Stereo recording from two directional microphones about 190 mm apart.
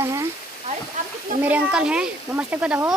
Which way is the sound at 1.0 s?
40° right (ahead or behind).